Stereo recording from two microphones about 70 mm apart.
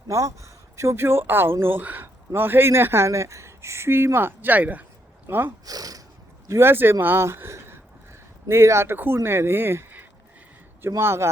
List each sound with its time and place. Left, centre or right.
0.1 s speech: right
3.1 s speech: right
5.6 s speech: right
6.5 s speech: right